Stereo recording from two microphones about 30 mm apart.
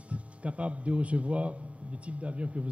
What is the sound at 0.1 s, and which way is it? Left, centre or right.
Speech, right.